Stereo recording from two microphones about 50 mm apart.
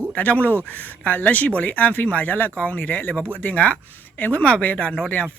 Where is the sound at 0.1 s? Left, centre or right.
Left.